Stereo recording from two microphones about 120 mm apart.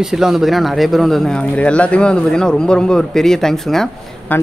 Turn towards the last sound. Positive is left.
turn(degrees=15)  # may be behind; listen again after turning